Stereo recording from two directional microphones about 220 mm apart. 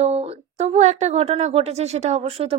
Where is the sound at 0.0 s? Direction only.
30° right (ahead or behind).